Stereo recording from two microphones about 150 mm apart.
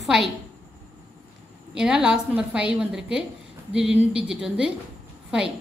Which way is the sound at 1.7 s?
5° right (ahead or behind).